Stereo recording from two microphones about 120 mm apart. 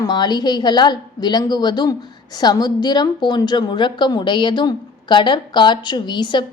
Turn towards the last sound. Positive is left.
turn(degrees=40)  # may be behind; listen again after turning